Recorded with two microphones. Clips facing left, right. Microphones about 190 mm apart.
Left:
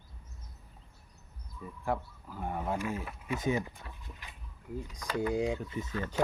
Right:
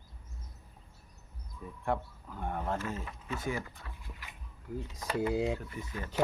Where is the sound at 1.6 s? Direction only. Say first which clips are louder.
Even; centre (ahead or behind); by 4.1 s 20° left (ahead or behind).